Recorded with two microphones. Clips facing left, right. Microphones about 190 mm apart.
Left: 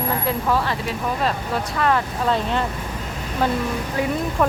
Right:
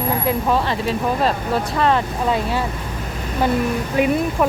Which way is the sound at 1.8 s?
25° right (ahead or behind).